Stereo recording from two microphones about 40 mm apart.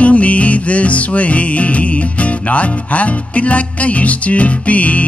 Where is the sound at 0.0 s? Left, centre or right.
Left.